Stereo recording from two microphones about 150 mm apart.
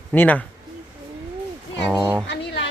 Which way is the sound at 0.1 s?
10° left (ahead or behind).